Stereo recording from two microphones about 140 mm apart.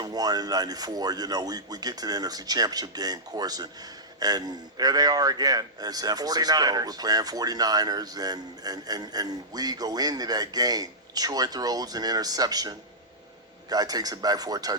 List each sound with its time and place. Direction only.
0.0 s a man's voice: 30° right (ahead or behind)